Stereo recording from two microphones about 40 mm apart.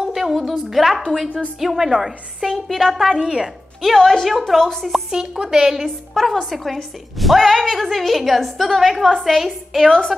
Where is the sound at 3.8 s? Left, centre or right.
Centre.